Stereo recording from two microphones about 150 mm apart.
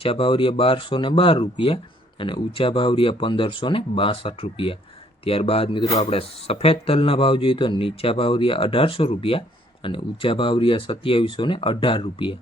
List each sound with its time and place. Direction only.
0.0 s speech: 35° left (ahead or behind)